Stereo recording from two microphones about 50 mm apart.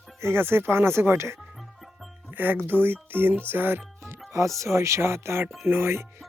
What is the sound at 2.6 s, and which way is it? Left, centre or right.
Speech, right.